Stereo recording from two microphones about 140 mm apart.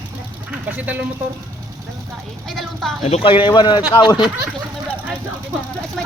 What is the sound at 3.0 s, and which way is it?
A man's voice, 45° left (ahead or behind).